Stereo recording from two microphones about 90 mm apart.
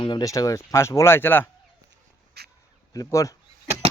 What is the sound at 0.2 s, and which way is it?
Speech, 40° left (ahead or behind).